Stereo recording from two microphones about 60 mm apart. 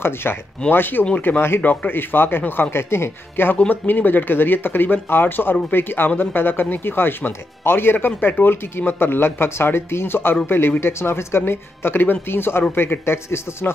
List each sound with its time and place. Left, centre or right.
0.0 s speech: left
3.5 s speech: left